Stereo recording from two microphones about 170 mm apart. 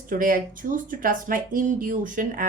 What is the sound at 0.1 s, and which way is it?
A woman's voice, 55° right (ahead or behind).